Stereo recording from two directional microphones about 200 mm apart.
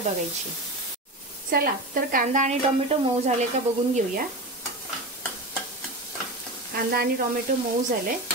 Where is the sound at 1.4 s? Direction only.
50° right (ahead or behind).